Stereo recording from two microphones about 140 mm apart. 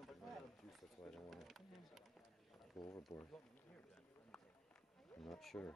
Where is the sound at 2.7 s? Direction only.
25° left (ahead or behind).